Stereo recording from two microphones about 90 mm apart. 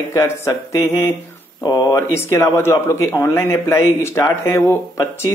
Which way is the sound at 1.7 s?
45° left (ahead or behind).